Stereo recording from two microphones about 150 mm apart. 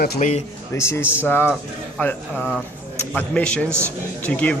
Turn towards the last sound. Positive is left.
turn(degrees=10)  # may be behind; listen again after turning